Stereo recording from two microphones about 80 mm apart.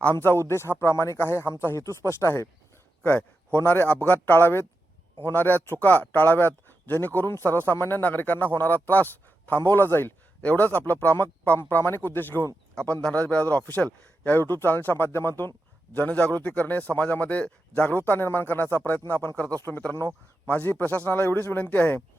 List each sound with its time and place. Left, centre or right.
0.0 s speech: left
13.0 s a man's voice: centre